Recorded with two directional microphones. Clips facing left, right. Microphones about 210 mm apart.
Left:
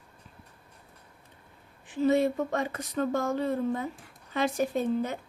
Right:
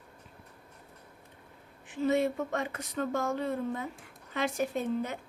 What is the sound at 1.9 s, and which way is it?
Speech, 35° left (ahead or behind).